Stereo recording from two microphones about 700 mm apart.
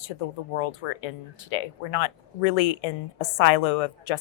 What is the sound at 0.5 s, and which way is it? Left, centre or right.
Speech, left.